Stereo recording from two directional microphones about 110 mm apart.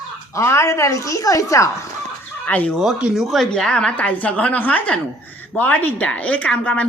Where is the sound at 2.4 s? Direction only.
15° left (ahead or behind).